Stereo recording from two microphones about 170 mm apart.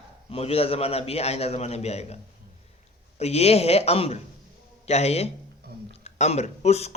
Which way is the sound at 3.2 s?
40° left (ahead or behind).